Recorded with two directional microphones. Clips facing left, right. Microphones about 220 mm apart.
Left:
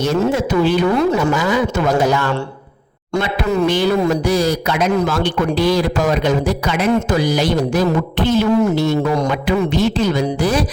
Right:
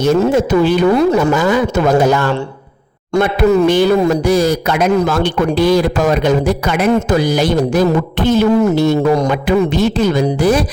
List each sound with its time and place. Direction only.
0.0 s a man's voice: 50° right (ahead or behind)
3.7 s a man's voice: 50° right (ahead or behind)